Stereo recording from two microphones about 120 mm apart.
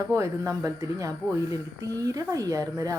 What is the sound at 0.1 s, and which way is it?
Speech, 25° right (ahead or behind).